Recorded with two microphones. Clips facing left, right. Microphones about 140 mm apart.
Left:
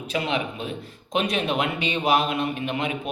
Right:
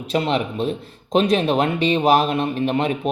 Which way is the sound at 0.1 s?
35° right (ahead or behind).